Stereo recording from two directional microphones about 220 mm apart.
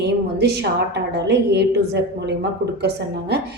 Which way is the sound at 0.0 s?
50° right (ahead or behind).